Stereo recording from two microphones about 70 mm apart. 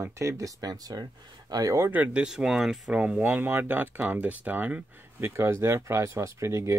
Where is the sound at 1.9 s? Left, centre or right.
Centre.